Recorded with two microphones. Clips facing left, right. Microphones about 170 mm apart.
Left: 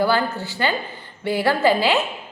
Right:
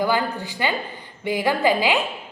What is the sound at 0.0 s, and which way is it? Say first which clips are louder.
A woman's voice: left 2 dB; 15° right (ahead or behind).